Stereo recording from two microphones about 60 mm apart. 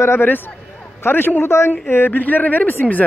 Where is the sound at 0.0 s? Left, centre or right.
Left.